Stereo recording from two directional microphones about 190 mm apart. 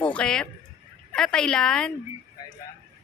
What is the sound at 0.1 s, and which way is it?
A woman's voice, 5° left (ahead or behind).